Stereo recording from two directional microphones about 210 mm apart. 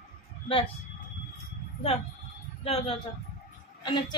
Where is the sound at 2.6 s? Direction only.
25° left (ahead or behind).